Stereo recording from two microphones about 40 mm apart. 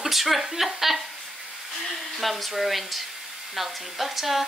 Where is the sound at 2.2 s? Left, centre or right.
Centre.